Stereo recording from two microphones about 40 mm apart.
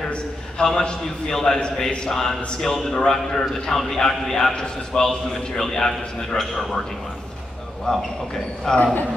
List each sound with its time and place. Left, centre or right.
0.6 s a man's voice: centre
7.9 s a man's voice: centre